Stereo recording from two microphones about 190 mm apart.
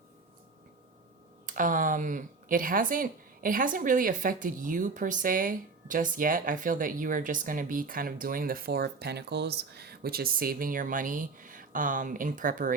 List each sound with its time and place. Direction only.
1.5 s speech: 45° right (ahead or behind)